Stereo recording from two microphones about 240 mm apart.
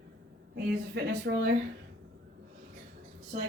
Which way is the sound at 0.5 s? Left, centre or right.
Right.